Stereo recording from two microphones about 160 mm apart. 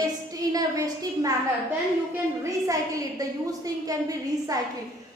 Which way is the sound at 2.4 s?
20° right (ahead or behind).